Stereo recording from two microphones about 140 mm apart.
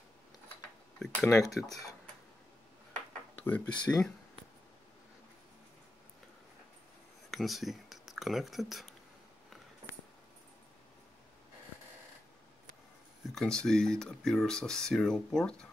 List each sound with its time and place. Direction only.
0.9 s dishes: 5° left (ahead or behind)
1.2 s speech: 20° left (ahead or behind)
3.4 s speech: 10° left (ahead or behind)
7.2 s speech: centre (ahead or behind)
13.3 s speech: 5° left (ahead or behind)